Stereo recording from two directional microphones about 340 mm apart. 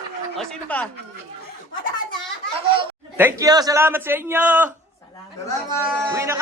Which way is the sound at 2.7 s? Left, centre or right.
Centre.